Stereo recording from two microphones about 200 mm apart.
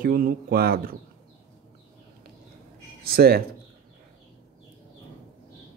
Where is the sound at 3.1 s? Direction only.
50° right (ahead or behind).